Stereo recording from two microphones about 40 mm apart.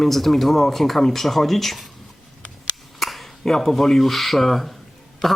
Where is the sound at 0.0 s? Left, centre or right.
Centre.